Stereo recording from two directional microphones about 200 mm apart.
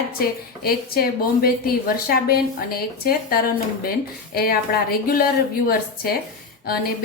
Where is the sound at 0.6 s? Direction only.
50° left (ahead or behind).